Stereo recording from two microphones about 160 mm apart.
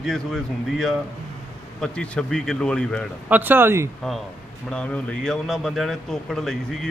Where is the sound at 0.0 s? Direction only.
Centre (ahead or behind).